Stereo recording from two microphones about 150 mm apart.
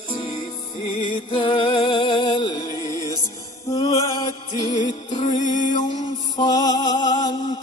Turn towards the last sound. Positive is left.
turn(degrees=25)  # may be behind; listen again after turning